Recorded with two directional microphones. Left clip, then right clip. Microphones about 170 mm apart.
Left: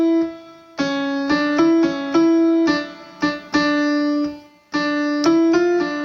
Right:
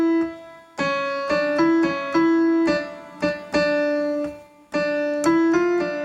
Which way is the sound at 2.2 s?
30° left (ahead or behind).